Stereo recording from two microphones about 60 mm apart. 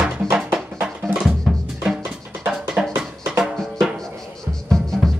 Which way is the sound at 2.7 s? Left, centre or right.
Right.